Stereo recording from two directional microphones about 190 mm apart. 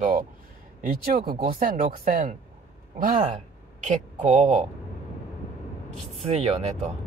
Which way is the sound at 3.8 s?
40° right (ahead or behind).